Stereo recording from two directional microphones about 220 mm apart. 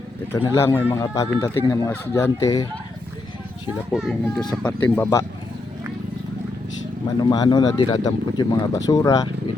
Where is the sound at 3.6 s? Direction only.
Centre (ahead or behind).